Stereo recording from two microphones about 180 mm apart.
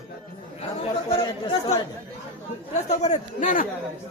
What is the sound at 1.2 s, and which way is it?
Speech, 30° left (ahead or behind).